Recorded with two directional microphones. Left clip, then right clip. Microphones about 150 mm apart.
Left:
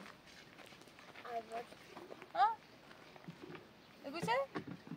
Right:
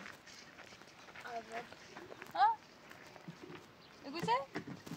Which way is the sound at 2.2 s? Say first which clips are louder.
Right 2 dB; 20° left (ahead or behind).